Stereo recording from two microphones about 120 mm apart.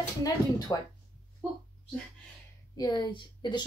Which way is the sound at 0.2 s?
30° left (ahead or behind).